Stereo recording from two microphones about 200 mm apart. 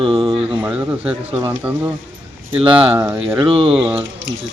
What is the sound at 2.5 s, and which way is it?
Speech, 25° right (ahead or behind).